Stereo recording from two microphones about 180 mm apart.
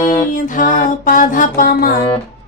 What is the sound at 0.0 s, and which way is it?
Music, 45° left (ahead or behind).